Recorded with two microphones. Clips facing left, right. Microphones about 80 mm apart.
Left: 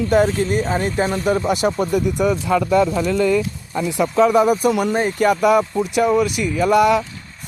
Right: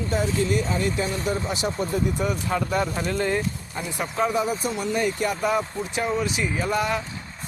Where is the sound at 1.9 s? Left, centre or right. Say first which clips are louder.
Left 7 dB; left.